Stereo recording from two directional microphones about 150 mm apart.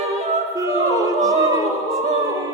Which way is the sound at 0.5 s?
20° right (ahead or behind).